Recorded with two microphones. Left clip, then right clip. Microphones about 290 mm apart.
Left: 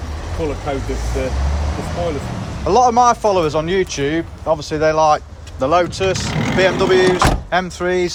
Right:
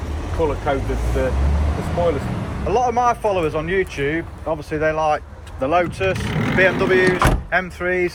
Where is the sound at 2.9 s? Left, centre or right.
Centre.